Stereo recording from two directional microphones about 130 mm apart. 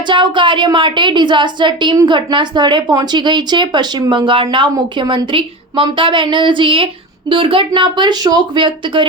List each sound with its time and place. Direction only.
0.1 s speech: 40° right (ahead or behind)